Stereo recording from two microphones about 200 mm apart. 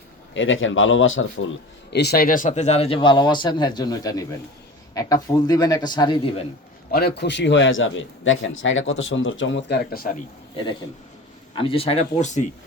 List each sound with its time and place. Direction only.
0.3 s a man's voice: 70° left (ahead or behind)
1.9 s speech: 55° left (ahead or behind); by 6.4 s 20° left (ahead or behind)
6.9 s a man's voice: 55° left (ahead or behind)
11.5 s speech: 25° left (ahead or behind)